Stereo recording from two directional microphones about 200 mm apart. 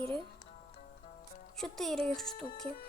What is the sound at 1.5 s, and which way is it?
A woman's voice, centre (ahead or behind).